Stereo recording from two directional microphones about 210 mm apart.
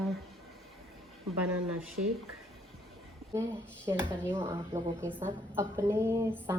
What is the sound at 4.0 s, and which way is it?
Speech, 5° left (ahead or behind).